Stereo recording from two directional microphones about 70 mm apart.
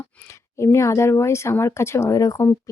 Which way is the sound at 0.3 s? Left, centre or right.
Left.